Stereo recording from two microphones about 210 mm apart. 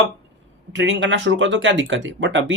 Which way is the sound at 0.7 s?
60° right (ahead or behind).